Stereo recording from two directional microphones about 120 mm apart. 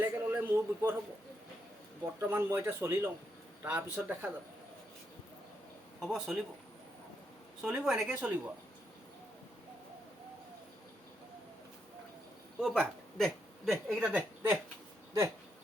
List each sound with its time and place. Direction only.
0.0 s a sound: 20° right (ahead or behind)
2.3 s a man's voice: 20° right (ahead or behind)
6.0 s speech: 5° right (ahead or behind)
7.6 s speech: 5° right (ahead or behind)
12.5 s speech: centre (ahead or behind)